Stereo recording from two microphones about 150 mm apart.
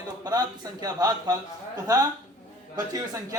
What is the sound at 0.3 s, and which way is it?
A man's voice, 25° right (ahead or behind).